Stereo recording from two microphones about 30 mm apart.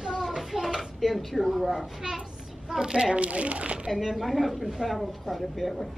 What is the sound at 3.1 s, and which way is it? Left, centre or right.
Speech, right.